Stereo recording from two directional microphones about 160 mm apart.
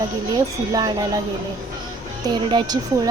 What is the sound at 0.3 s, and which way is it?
Speech, 25° right (ahead or behind).